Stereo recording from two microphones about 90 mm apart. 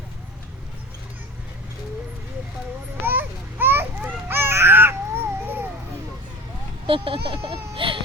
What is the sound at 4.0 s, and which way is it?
Babbling, 15° right (ahead or behind).